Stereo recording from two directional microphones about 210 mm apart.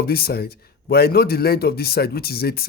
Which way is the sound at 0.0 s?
45° left (ahead or behind).